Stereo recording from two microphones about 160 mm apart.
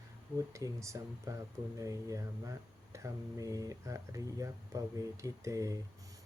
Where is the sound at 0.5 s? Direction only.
20° right (ahead or behind).